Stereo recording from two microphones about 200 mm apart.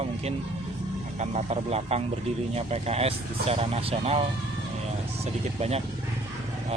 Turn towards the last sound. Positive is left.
turn(degrees=-30)  # may be behind; listen again after turning